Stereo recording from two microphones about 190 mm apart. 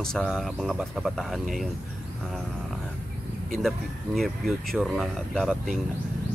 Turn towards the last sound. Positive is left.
turn(degrees=0)  # may be behind; listen again after turning